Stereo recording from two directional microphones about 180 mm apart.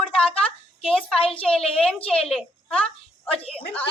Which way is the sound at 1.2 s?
30° left (ahead or behind).